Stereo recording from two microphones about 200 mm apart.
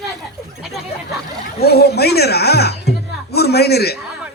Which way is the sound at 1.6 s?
55° left (ahead or behind).